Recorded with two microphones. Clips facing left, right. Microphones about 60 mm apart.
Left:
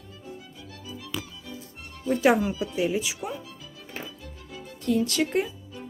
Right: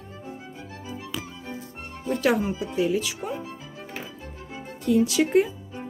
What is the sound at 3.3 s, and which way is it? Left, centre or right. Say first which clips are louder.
Music: right 4 dB; right.